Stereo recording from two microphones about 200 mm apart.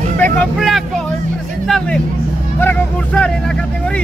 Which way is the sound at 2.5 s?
10° left (ahead or behind).